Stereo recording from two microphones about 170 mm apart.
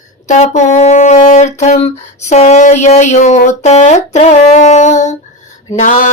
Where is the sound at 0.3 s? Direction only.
45° left (ahead or behind).